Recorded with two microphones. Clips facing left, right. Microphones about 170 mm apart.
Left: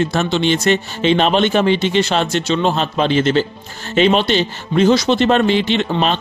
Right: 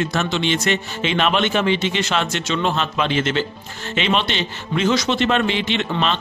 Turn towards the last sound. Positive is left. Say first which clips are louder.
# left 4 dB
turn(degrees=40)  # may be behind; listen again after turning